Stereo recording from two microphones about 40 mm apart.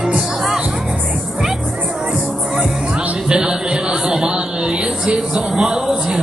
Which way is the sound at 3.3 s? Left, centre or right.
Centre.